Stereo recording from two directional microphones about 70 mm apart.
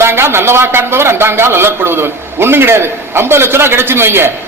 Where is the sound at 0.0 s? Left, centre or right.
Right.